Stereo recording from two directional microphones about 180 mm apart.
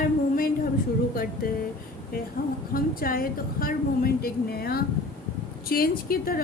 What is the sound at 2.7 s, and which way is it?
A woman's voice, 55° left (ahead or behind).